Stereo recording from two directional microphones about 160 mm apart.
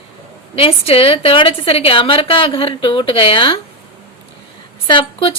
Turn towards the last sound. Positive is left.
turn(degrees=30)  # may be behind; listen again after turning